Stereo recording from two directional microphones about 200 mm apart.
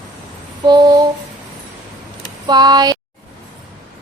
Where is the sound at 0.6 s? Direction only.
20° right (ahead or behind).